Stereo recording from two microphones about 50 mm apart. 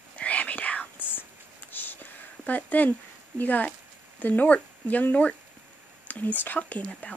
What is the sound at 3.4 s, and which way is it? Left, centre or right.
Speech, left.